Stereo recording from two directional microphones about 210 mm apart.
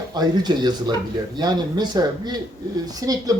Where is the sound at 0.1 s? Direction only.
20° right (ahead or behind).